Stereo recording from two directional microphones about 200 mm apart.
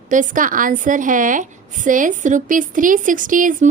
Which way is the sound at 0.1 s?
40° right (ahead or behind).